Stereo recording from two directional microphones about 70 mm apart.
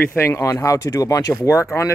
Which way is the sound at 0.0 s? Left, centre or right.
Left.